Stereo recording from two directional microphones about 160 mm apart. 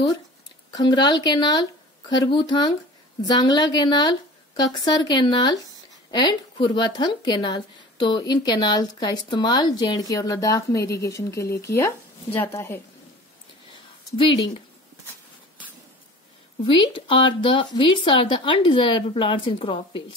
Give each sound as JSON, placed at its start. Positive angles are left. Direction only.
{"t": 0.7, "sound": "a woman's voice", "side_deg": 25}
{"t": 14.1, "sound": "speech", "side_deg": 30}
{"t": 16.6, "sound": "speech", "side_deg": 35}